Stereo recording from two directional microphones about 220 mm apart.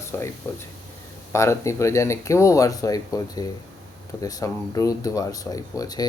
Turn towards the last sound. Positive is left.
turn(degrees=15)  # may be behind; listen again after turning